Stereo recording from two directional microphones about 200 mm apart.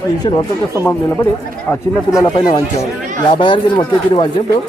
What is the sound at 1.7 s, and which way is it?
Speech, 15° left (ahead or behind).